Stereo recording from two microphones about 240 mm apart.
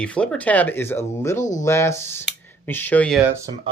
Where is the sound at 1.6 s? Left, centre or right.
Centre.